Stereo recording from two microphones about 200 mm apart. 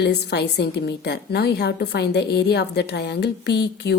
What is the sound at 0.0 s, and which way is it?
A woman's voice, 55° left (ahead or behind).